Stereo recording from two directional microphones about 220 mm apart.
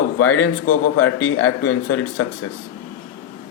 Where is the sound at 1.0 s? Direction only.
75° left (ahead or behind).